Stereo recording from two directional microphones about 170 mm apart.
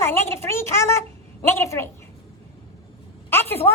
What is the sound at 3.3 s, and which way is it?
Speech, 15° left (ahead or behind).